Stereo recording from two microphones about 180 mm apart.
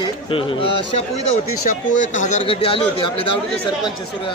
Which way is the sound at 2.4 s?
30° left (ahead or behind).